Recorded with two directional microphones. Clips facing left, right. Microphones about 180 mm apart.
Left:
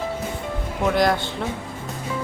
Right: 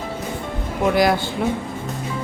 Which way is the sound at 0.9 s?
5° right (ahead or behind).